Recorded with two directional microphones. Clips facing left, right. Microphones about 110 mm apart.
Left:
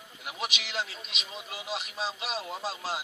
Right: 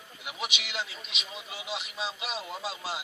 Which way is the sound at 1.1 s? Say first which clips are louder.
Left 1 dB; centre (ahead or behind).